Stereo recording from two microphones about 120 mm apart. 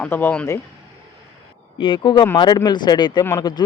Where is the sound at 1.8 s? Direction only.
45° left (ahead or behind).